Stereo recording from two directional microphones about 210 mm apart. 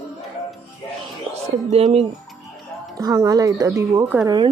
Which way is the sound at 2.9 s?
15° right (ahead or behind).